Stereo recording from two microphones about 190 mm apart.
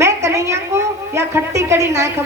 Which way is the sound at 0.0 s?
15° right (ahead or behind).